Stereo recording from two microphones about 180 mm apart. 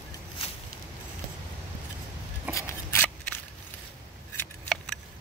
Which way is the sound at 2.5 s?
10° left (ahead or behind).